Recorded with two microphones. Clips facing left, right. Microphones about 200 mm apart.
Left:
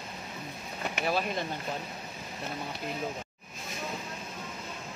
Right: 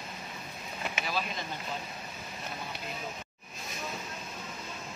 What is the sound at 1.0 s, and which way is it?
Speech, 55° left (ahead or behind).